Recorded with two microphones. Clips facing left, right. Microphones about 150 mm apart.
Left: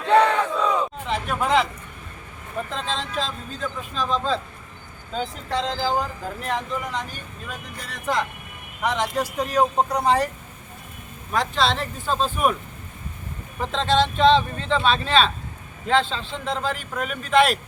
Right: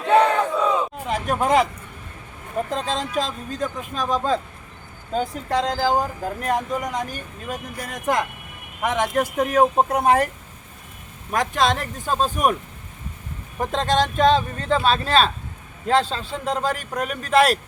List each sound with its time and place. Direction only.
0.0 s battle cry: 15° right (ahead or behind)
1.1 s speech: 45° right (ahead or behind)
2.9 s speech: 45° right (ahead or behind)
5.1 s speech: 45° right (ahead or behind)
9.7 s speech: 20° right (ahead or behind)
11.3 s speech: 45° right (ahead or behind)
13.6 s a man's voice: 45° right (ahead or behind)